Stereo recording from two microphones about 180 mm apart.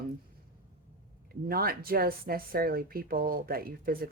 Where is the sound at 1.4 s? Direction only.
55° right (ahead or behind).